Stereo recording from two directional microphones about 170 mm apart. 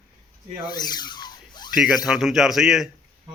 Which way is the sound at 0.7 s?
25° left (ahead or behind).